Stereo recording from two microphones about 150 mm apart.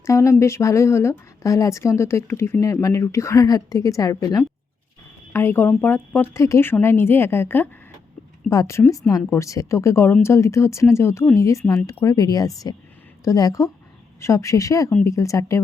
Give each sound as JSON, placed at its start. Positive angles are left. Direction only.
{"t": 0.0, "sound": "a woman's voice", "side_deg": 20}